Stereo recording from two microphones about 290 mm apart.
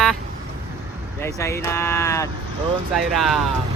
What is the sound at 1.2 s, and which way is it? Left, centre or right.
Speech, centre.